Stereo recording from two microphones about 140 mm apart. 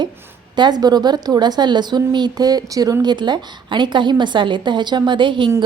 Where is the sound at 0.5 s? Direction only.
30° right (ahead or behind).